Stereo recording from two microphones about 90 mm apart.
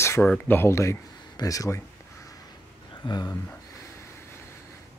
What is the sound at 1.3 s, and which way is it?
Speech, 40° left (ahead or behind).